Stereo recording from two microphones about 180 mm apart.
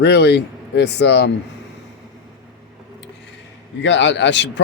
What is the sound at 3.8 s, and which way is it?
Speech, 90° left.